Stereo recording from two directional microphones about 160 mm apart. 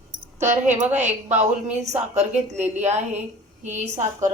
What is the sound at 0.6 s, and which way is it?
Speech, 10° right (ahead or behind).